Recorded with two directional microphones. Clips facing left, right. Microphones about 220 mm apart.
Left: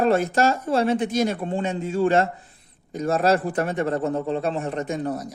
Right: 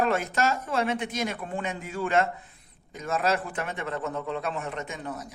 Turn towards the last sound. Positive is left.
turn(degrees=35)  # may be behind; listen again after turning